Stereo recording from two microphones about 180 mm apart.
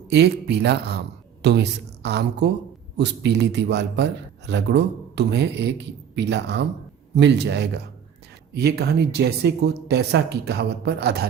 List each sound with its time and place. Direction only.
0.1 s a man's voice: 65° right (ahead or behind)